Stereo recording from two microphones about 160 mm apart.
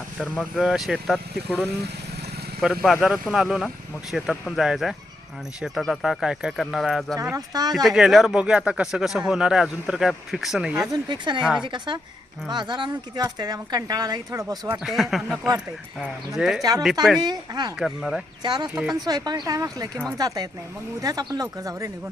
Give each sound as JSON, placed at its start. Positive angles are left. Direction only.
{"t": 0.2, "sound": "speech", "side_deg": 0}
{"t": 2.8, "sound": "speech", "side_deg": 0}
{"t": 7.2, "sound": "speech", "side_deg": -20}
{"t": 7.7, "sound": "speech", "side_deg": 0}
{"t": 10.8, "sound": "speech", "side_deg": -25}
{"t": 14.8, "sound": "speech", "side_deg": 0}
{"t": 17.2, "sound": "speech", "side_deg": -25}
{"t": 17.7, "sound": "speech", "side_deg": 0}
{"t": 18.4, "sound": "speech", "side_deg": -30}
{"t": 18.7, "sound": "speech", "side_deg": -5}
{"t": 18.9, "sound": "speech", "side_deg": -25}